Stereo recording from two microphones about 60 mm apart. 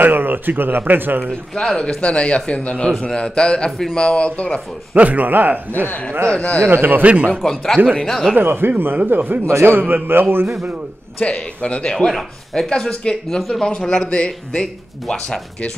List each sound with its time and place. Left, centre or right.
0.0 s a man's voice: right
1.3 s speech: centre
2.0 s speech: centre
4.9 s speech: right
5.9 s speech: left
6.6 s a man's voice: right
7.4 s speech: centre
8.4 s a man's voice: right
9.5 s a man's voice: right
9.8 s a man's voice: right
11.2 s speech: centre